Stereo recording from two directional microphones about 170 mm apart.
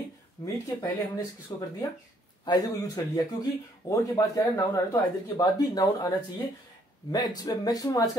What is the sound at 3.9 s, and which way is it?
Speech, 20° left (ahead or behind).